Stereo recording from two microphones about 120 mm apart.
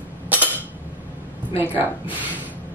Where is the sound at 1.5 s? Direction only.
15° right (ahead or behind).